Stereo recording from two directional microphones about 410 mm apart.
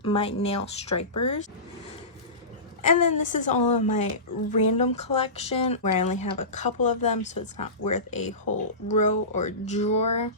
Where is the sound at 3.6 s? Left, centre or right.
Left.